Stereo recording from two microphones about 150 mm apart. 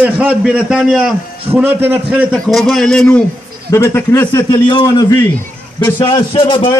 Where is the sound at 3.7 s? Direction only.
15° left (ahead or behind).